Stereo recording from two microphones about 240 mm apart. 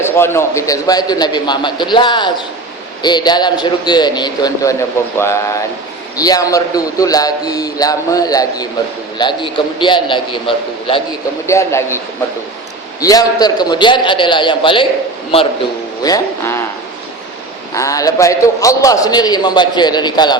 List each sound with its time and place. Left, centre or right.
0.0 s a man's voice: centre
16.0 s a man's voice: centre
17.7 s a man's voice: centre